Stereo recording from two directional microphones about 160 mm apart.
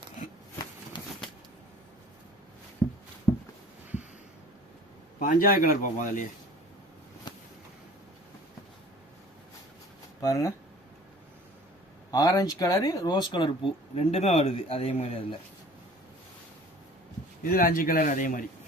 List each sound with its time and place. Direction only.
0.9 s a sound: 30° left (ahead or behind)
2.8 s a sound: 5° left (ahead or behind)
5.2 s speech: 60° left (ahead or behind)
10.2 s speech: 20° left (ahead or behind)
12.1 s speech: 20° left (ahead or behind)
13.9 s a man's voice: 40° left (ahead or behind)
17.4 s speech: 65° left (ahead or behind)